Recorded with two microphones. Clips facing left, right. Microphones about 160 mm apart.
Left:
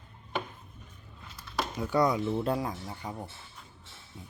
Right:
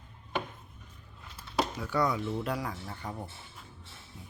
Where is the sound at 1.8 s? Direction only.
20° left (ahead or behind).